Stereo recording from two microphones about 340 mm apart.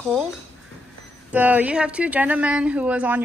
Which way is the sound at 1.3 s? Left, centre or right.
Centre.